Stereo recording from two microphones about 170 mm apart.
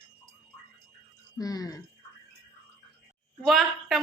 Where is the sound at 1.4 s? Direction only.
20° left (ahead or behind).